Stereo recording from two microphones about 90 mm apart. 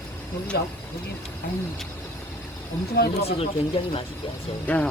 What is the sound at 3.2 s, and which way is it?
Speech, 90° left.